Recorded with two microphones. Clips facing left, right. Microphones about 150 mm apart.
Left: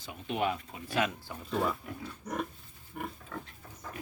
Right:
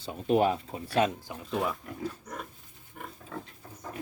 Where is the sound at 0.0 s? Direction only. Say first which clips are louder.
Right 7 dB; 35° right (ahead or behind).